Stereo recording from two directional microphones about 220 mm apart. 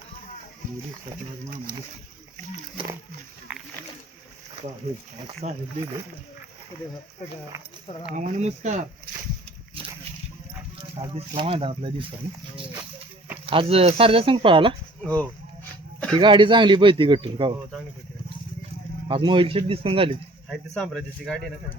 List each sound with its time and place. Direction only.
3.5 s speech: 5° right (ahead or behind)
5.4 s speech: 30° right (ahead or behind)
8.1 s speech: 30° right (ahead or behind)
11.1 s speech: 25° right (ahead or behind)
13.4 s speech: 25° right (ahead or behind)
15.0 s speech: 5° left (ahead or behind)
16.1 s speech: 20° right (ahead or behind)
19.0 s speech: 20° right (ahead or behind)
20.5 s speech: centre (ahead or behind)